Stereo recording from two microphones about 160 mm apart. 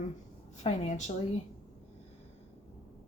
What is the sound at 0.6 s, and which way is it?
Speech, 45° left (ahead or behind).